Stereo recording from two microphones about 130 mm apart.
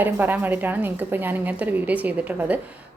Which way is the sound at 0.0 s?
15° right (ahead or behind).